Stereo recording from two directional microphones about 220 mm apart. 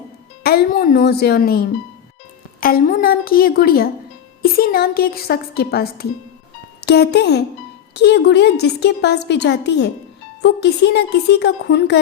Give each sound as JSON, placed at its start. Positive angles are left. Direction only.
{"t": 0.4, "sound": "a woman's voice", "side_deg": 40}